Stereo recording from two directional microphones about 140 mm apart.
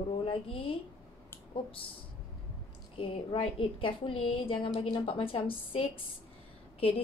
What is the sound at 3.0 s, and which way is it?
A woman's voice, 40° left (ahead or behind).